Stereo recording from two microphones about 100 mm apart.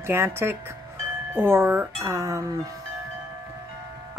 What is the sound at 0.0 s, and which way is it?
Speech, 25° right (ahead or behind).